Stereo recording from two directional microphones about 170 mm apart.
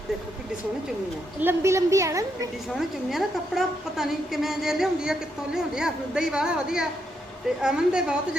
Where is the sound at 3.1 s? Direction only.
Centre (ahead or behind).